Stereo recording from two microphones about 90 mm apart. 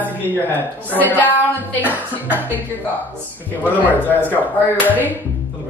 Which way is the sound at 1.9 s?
20° right (ahead or behind).